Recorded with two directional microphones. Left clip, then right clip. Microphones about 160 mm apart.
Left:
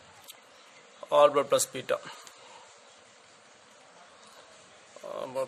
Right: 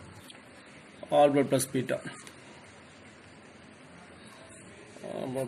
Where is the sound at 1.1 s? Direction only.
75° left (ahead or behind).